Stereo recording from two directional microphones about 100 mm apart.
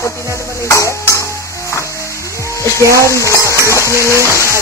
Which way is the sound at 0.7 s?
30° left (ahead or behind).